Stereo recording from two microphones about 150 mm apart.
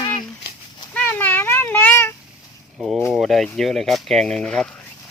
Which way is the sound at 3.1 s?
Centre (ahead or behind).